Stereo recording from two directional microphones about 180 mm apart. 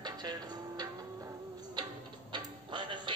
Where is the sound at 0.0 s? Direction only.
20° right (ahead or behind).